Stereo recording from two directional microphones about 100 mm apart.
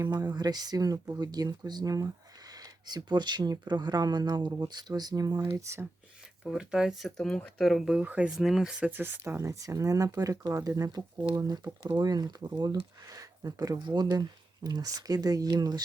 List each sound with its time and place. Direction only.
0.0 s speech: 40° right (ahead or behind)
6.4 s speech: 5° right (ahead or behind)
8.4 s speech: centre (ahead or behind)
8.9 s speech: 20° right (ahead or behind); by 15.8 s 45° right (ahead or behind)